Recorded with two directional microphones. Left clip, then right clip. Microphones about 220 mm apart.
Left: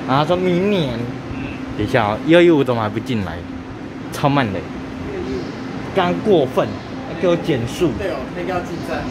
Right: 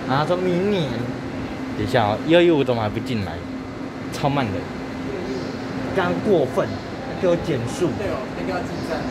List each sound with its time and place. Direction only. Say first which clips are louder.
0.1 s speech: left 4 dB; 15° left (ahead or behind)
1.9 s speech: left 3 dB; 10° left (ahead or behind)
5.9 s speech: left 4 dB; 15° left (ahead or behind)
7.8 s speech: left 4 dB; 20° left (ahead or behind)